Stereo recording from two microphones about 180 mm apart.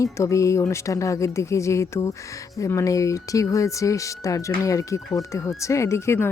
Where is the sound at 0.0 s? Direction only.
15° left (ahead or behind).